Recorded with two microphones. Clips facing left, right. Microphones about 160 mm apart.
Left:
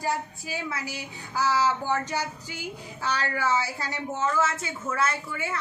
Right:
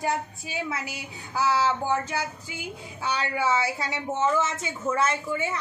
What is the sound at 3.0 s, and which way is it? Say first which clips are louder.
A woman's voice: right 1 dB; 20° right (ahead or behind).